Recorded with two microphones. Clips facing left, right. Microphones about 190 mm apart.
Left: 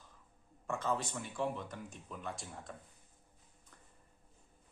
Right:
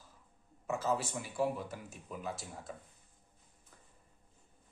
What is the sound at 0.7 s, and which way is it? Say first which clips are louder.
Speech: right 2 dB; 5° right (ahead or behind).